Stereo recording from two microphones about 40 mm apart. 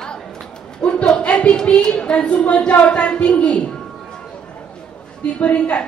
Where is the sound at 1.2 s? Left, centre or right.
Left.